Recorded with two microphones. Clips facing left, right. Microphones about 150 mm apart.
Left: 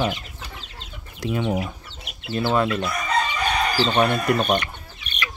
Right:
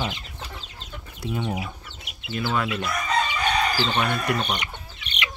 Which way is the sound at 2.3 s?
35° left (ahead or behind).